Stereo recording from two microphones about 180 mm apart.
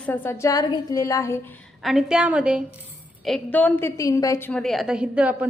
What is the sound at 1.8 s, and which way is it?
Speech, centre (ahead or behind).